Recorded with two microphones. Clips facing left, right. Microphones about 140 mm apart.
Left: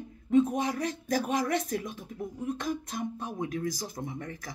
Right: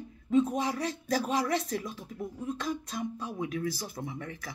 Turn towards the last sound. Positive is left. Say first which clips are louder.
# left 1 dB
turn(degrees=45)  # may be behind; listen again after turning